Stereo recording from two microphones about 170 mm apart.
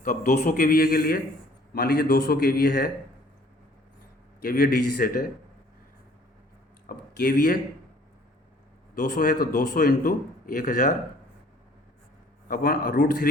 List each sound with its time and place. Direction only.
0.0 s a man's voice: 50° left (ahead or behind)
4.4 s a man's voice: 55° left (ahead or behind)
6.8 s speech: 55° left (ahead or behind)
9.0 s a man's voice: 50° left (ahead or behind)
12.5 s a man's voice: 55° left (ahead or behind)